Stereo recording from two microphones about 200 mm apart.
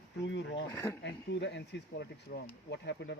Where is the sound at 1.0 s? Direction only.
60° left (ahead or behind).